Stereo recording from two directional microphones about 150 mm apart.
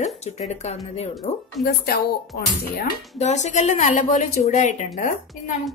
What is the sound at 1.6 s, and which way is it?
Speech, 90° left.